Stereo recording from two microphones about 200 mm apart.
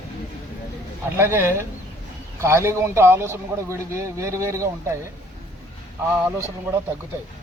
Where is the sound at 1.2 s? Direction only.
10° right (ahead or behind).